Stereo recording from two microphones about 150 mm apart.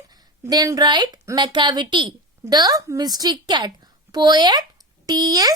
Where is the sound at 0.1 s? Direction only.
25° right (ahead or behind).